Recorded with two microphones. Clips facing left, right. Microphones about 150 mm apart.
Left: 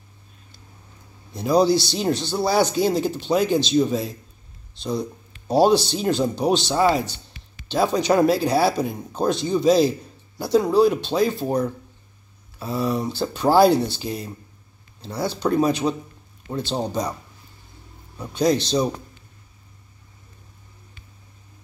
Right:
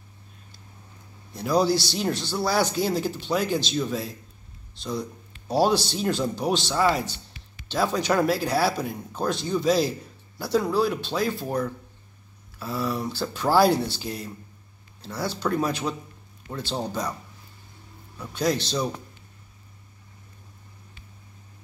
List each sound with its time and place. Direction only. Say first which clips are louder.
1.3 s speech: left 4 dB; 20° left (ahead or behind)
5.5 s speech: left 5 dB; 15° left (ahead or behind)
18.1 s speech: left 5 dB; 15° left (ahead or behind)